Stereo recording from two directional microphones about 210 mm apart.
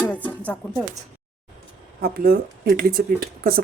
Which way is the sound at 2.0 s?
45° right (ahead or behind).